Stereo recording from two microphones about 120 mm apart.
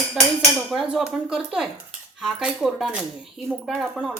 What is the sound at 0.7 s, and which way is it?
A woman's voice, 5° right (ahead or behind).